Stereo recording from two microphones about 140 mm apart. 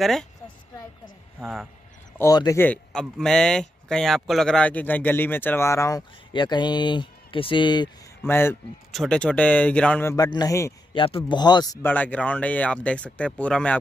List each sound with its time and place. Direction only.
0.0 s speech: centre (ahead or behind)
1.4 s speech: centre (ahead or behind)
2.1 s a man's voice: 25° left (ahead or behind)
2.6 s speech: 10° left (ahead or behind)
6.3 s speech: 35° left (ahead or behind)
8.2 s speech: 15° left (ahead or behind)
8.9 s speech: 5° left (ahead or behind)
10.1 s a man's voice: 25° left (ahead or behind)
10.9 s speech: 40° left (ahead or behind)
11.8 s speech: 10° left (ahead or behind)